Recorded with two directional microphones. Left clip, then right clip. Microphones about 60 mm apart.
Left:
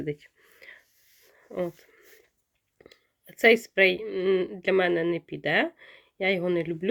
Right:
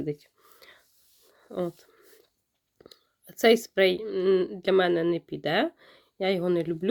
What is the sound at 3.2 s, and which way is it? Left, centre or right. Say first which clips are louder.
Speech: left 1 dB; right.